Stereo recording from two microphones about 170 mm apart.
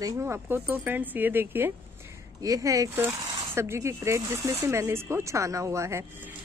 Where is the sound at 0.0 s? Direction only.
15° right (ahead or behind).